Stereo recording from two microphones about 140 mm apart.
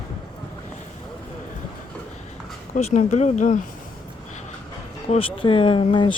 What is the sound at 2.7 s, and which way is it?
Speech, 60° left (ahead or behind).